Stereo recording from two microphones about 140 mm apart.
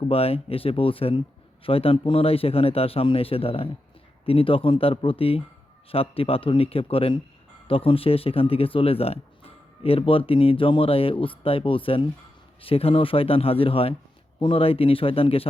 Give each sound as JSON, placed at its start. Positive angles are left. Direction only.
{"t": 0.1, "sound": "a man's voice", "side_deg": 45}